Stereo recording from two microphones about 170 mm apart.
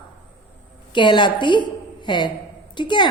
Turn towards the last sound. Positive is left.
turn(degrees=25)  # may be behind; listen again after turning